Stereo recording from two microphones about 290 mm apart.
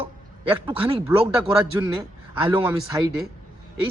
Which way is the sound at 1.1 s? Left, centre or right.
Centre.